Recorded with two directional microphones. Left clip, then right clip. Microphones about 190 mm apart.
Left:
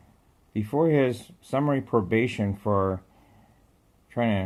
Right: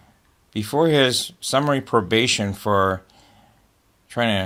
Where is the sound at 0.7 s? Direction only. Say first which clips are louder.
Right 5 dB; 20° right (ahead or behind).